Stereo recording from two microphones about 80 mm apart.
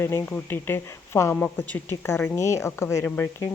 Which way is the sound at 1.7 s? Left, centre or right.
Left.